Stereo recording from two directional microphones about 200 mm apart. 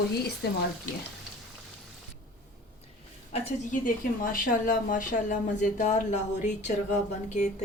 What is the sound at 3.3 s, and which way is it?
A woman's voice, 40° left (ahead or behind).